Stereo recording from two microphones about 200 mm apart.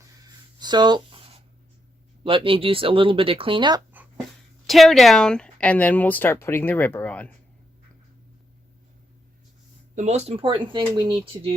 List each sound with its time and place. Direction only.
0.0 s a sound: 20° right (ahead or behind)
2.2 s speech: 25° right (ahead or behind)
4.6 s speech: centre (ahead or behind)
9.9 s speech: 35° right (ahead or behind)